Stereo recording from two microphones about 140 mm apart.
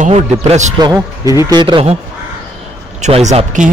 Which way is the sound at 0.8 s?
20° right (ahead or behind).